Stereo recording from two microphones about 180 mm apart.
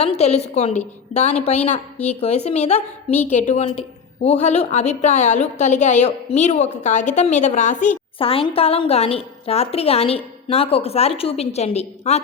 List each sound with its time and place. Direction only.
0.0 s a woman's voice: 35° left (ahead or behind)